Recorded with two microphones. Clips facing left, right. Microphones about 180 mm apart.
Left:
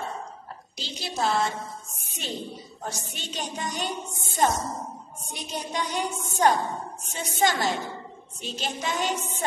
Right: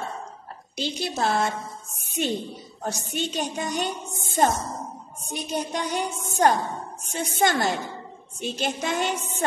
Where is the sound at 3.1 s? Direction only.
55° right (ahead or behind).